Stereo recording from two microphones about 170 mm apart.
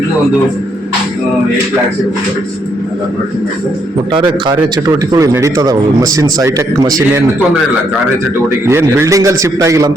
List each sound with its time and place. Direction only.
4.1 s speech: 25° right (ahead or behind)
8.6 s a man's voice: 15° right (ahead or behind)